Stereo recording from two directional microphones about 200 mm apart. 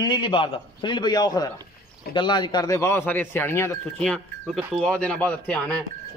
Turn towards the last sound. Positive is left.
turn(degrees=5)  # may be behind; listen again after turning